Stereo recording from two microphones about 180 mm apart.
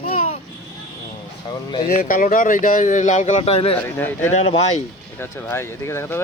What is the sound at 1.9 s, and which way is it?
Speech, 50° left (ahead or behind).